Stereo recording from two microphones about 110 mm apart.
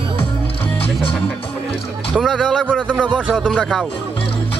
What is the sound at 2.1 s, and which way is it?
Speech, centre (ahead or behind).